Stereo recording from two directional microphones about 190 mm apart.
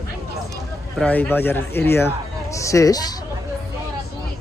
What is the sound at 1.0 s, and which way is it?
Speech, 10° left (ahead or behind).